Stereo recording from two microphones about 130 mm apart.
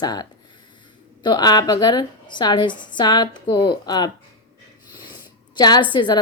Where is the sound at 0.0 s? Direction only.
30° left (ahead or behind).